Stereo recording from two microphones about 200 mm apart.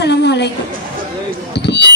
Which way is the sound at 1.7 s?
60° left (ahead or behind).